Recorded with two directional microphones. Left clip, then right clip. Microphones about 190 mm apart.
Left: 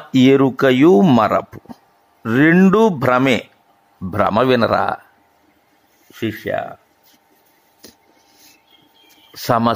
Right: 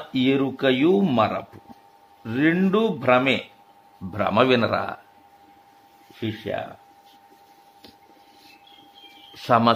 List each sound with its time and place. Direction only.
0.1 s speech: 50° left (ahead or behind)
4.1 s speech: 40° left (ahead or behind)
6.5 s speech: 40° left (ahead or behind)
9.3 s speech: 40° left (ahead or behind)